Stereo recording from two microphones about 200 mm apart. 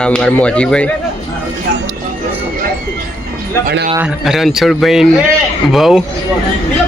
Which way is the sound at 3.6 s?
55° right (ahead or behind).